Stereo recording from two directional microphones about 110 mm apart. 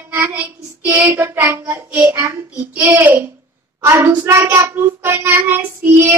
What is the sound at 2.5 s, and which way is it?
A child's voice, 15° right (ahead or behind).